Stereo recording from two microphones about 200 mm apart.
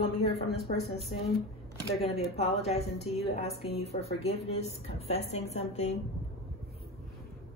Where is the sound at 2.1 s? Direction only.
30° left (ahead or behind).